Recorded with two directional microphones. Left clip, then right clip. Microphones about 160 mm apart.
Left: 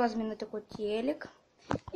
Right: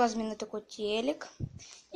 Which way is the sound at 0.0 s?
Centre (ahead or behind).